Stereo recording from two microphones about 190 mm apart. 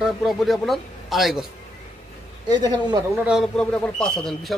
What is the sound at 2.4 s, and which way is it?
Speech, 20° right (ahead or behind).